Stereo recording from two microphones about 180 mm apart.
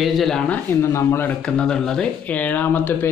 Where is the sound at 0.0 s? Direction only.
Centre (ahead or behind).